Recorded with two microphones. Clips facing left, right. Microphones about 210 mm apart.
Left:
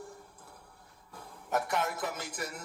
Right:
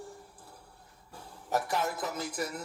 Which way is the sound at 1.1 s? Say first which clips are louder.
Right 1 dB; 35° right (ahead or behind).